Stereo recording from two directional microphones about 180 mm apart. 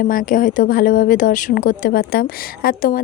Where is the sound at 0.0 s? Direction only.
50° left (ahead or behind).